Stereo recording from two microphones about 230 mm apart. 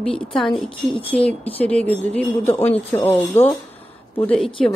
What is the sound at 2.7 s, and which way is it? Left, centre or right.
Speech, left.